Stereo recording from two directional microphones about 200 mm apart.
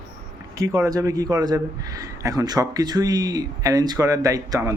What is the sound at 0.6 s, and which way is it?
A man's voice, 15° right (ahead or behind).